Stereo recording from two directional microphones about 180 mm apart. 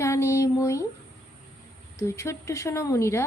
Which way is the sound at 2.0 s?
15° left (ahead or behind).